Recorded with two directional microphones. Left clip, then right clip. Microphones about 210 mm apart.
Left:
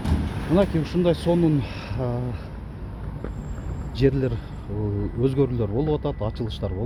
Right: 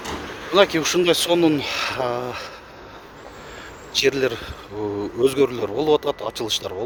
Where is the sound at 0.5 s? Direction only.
30° right (ahead or behind).